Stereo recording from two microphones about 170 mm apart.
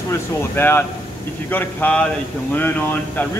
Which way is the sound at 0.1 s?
15° left (ahead or behind).